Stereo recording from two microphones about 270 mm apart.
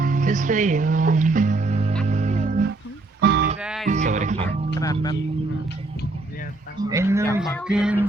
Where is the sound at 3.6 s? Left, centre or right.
Centre.